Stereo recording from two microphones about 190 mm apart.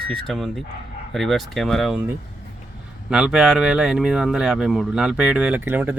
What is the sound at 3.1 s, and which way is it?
Speech, 5° right (ahead or behind).